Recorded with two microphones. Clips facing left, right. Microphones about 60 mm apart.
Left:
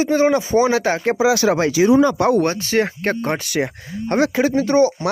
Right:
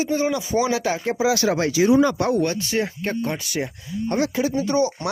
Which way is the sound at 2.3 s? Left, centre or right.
Left.